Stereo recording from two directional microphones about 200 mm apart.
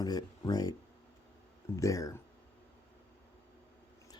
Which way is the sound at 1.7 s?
15° left (ahead or behind).